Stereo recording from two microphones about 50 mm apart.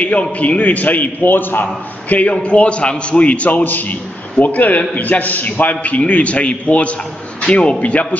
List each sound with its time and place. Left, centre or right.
0.0 s a man's voice: left